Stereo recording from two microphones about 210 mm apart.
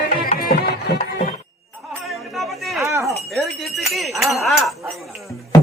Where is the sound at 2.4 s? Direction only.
Centre (ahead or behind).